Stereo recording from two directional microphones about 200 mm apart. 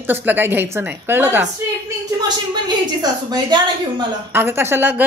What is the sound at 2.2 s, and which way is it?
A woman's voice, 20° right (ahead or behind).